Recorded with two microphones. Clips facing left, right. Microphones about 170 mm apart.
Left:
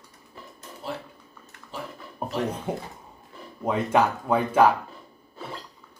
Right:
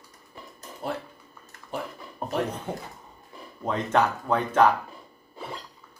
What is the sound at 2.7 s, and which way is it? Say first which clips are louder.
Speech: left 3 dB; 10° left (ahead or behind).